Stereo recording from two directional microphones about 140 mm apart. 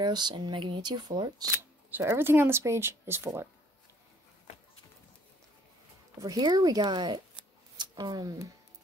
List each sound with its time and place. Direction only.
0.0 s speech: 30° right (ahead or behind)
1.9 s speech: 15° right (ahead or behind)
6.2 s speech: 25° right (ahead or behind)